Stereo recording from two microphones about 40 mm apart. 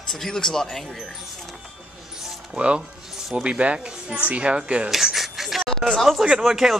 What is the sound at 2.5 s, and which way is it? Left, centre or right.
Speech, right.